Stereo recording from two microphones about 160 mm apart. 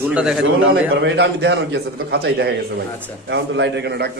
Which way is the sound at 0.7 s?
90° right.